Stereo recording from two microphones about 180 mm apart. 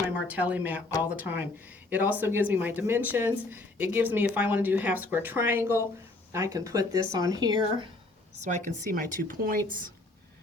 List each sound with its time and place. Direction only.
0.3 s speech: 10° right (ahead or behind)
8.4 s speech: 45° right (ahead or behind)